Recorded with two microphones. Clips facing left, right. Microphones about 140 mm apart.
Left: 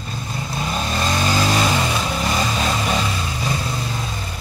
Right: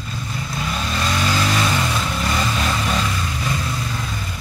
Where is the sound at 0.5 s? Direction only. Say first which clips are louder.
Left 2 dB; 30° left (ahead or behind).